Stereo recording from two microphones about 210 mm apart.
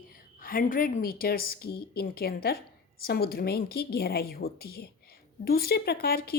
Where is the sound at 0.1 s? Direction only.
40° left (ahead or behind).